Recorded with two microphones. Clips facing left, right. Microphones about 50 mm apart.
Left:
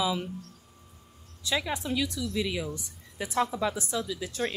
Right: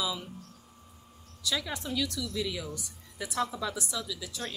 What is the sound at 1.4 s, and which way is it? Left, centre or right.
A woman's voice, left.